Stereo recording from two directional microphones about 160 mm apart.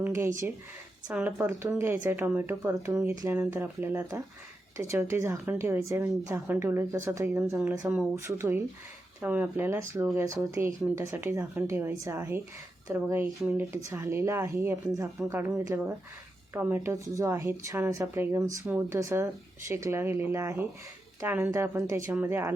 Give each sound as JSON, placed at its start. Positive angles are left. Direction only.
{"t": 0.0, "sound": "speech", "side_deg": -15}
{"t": 13.8, "sound": "speech", "side_deg": -15}